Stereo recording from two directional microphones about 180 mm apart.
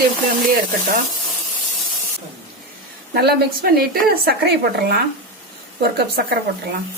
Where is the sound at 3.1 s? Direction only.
60° right (ahead or behind).